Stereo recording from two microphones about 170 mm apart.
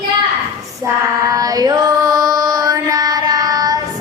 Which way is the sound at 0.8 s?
20° right (ahead or behind).